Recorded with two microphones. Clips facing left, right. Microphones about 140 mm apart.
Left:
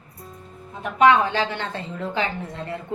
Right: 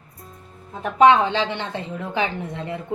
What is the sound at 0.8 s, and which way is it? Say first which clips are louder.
A woman's voice: right 2 dB; 30° right (ahead or behind).